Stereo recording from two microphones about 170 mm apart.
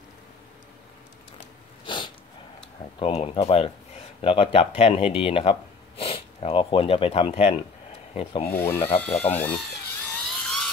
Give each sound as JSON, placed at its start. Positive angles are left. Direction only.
{"t": 1.9, "sound": "sneeze", "side_deg": 25}
{"t": 2.6, "sound": "speech", "side_deg": 35}
{"t": 8.5, "sound": "speech", "side_deg": 10}
{"t": 10.2, "sound": "a sound", "side_deg": 0}